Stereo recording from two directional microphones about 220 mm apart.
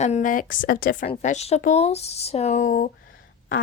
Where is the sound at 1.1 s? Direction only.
30° left (ahead or behind).